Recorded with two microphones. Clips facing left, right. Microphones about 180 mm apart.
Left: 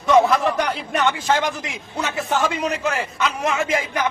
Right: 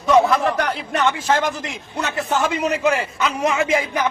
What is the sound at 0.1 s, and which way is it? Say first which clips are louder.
A man's voice: even; centre (ahead or behind).